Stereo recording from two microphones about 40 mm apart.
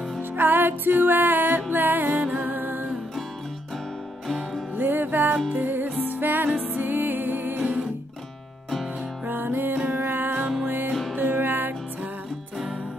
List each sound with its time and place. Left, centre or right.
0.4 s music: right
4.7 s music: right
9.2 s music: right
10.9 s music: centre
11.1 s music: right